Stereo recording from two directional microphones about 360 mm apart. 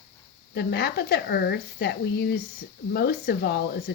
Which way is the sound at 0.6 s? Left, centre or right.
Left.